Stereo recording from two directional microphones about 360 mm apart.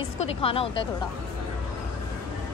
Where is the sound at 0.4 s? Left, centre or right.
Centre.